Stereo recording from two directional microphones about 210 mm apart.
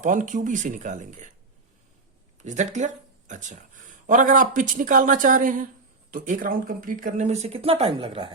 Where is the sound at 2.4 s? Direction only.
35° right (ahead or behind).